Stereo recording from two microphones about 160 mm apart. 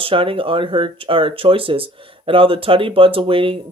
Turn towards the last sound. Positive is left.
turn(degrees=-35)  # may be behind; listen again after turning